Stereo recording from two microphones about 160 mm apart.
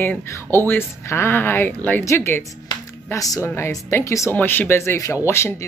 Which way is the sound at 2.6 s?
20° left (ahead or behind).